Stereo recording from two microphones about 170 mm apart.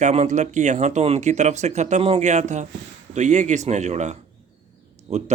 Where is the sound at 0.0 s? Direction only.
40° right (ahead or behind).